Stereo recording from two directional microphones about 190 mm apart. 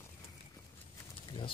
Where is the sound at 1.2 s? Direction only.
25° left (ahead or behind).